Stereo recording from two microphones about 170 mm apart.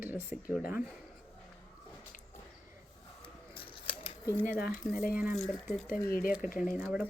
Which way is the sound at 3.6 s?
30° left (ahead or behind).